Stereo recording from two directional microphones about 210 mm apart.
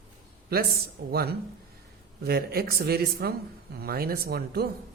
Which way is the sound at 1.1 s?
50° right (ahead or behind).